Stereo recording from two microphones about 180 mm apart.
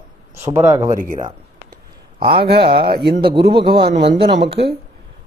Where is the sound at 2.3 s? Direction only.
65° right (ahead or behind).